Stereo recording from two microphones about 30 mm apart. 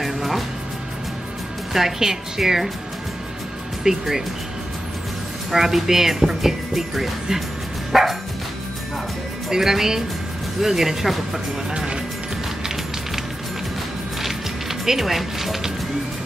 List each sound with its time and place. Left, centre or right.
0.0 s music: centre
1.7 s speech: centre
3.9 s speech: right
5.5 s speech: centre
7.9 s music: centre
9.5 s speech: centre
11.7 s speech: right
14.2 s music: centre